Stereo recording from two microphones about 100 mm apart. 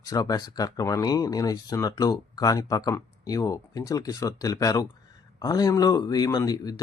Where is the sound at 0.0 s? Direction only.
35° left (ahead or behind).